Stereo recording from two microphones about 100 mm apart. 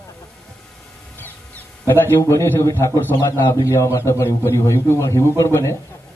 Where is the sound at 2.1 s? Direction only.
30° left (ahead or behind).